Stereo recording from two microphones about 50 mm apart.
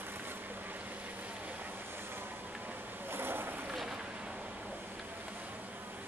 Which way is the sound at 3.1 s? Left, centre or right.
Right.